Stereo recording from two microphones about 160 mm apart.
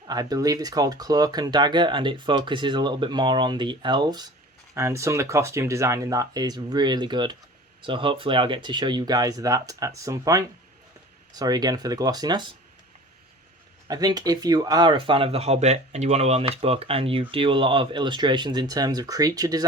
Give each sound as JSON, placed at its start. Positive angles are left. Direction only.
{"t": 0.1, "sound": "speech", "side_deg": -25}
{"t": 13.8, "sound": "speech", "side_deg": -25}